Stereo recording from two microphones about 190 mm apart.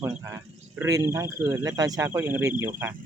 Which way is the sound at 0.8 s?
15° right (ahead or behind).